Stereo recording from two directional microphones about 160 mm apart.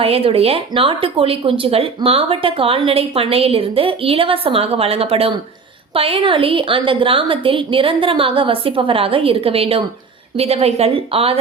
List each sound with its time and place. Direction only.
0.0 s speech: 40° right (ahead or behind)